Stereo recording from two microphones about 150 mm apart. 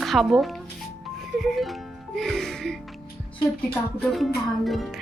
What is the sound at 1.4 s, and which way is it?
Music, centre (ahead or behind).